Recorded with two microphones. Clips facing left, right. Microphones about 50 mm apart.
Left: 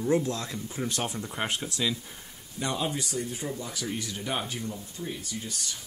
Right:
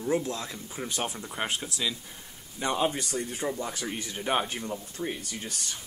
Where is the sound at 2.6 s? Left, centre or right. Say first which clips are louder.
Right 3 dB; right.